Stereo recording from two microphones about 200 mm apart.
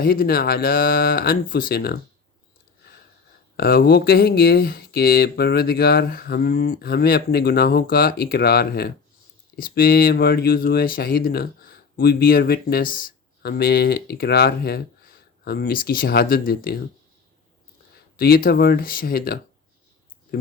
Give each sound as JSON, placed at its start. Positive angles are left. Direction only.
{"t": 0.0, "sound": "speech", "side_deg": 50}
{"t": 3.6, "sound": "speech", "side_deg": 50}
{"t": 18.2, "sound": "speech", "side_deg": 50}